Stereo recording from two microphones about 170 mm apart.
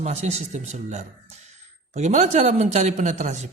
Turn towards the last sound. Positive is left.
turn(degrees=-45)  # may be behind; listen again after turning